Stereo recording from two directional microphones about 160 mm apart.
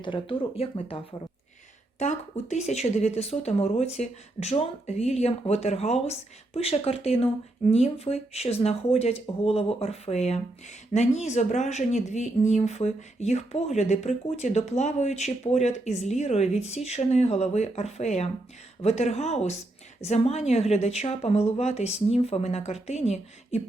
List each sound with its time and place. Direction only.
0.0 s speech: 30° left (ahead or behind)